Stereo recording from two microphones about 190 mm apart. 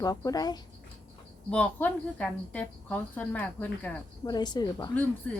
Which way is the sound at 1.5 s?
5° left (ahead or behind).